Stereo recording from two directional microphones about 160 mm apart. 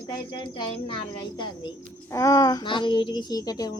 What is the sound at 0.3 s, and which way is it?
A woman's voice, 30° left (ahead or behind).